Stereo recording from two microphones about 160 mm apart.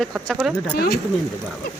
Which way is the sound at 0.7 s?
75° left (ahead or behind).